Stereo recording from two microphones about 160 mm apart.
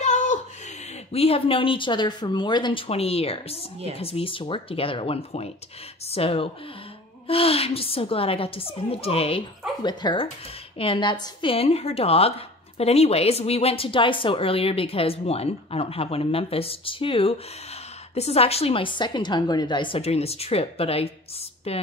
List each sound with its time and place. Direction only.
0.0 s a sound: 50° left (ahead or behind)
1.1 s a woman's voice: 35° left (ahead or behind)
9.8 s a woman's voice: 25° left (ahead or behind)